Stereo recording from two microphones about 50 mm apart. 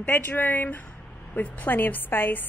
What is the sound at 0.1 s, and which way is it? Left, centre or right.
Speech, left.